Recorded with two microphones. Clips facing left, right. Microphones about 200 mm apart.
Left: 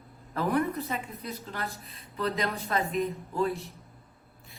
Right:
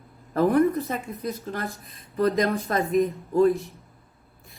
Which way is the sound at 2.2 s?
40° right (ahead or behind).